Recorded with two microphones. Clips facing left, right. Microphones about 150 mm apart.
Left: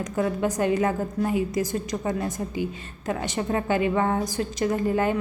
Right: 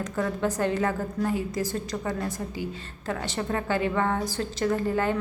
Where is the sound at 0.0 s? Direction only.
15° left (ahead or behind).